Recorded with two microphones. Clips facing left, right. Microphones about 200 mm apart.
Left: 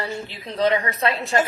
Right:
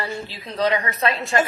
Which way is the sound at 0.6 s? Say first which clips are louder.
Left 1 dB; 25° left (ahead or behind).